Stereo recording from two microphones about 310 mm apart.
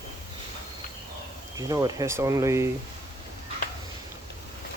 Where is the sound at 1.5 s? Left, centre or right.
Centre.